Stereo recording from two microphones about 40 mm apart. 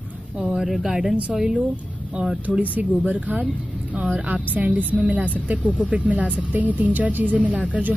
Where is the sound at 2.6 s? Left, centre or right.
Right.